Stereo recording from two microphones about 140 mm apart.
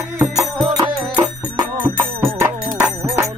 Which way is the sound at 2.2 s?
15° right (ahead or behind).